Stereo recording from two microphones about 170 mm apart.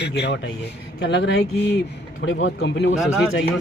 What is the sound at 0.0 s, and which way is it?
A man's voice, 90° left.